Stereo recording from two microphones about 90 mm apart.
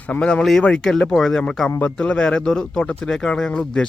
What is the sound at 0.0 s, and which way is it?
Speech, 10° left (ahead or behind).